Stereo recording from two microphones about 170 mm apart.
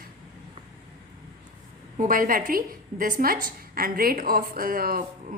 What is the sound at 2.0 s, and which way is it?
A woman's voice, 55° right (ahead or behind).